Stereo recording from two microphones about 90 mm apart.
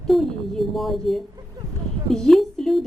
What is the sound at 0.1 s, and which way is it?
A woman's voice, centre (ahead or behind).